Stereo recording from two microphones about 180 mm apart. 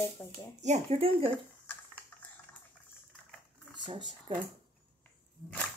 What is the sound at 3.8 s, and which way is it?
Speech, 25° right (ahead or behind).